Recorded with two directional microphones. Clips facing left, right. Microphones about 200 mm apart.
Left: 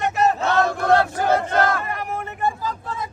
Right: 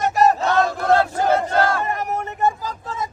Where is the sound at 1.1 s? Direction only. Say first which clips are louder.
Right 1 dB; 30° right (ahead or behind).